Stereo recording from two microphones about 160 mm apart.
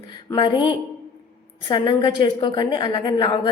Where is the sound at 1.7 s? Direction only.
30° left (ahead or behind).